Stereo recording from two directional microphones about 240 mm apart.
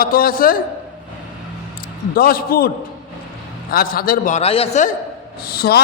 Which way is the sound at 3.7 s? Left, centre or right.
Left.